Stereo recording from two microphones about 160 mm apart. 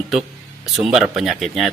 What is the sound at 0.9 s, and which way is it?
Speech, 5° right (ahead or behind).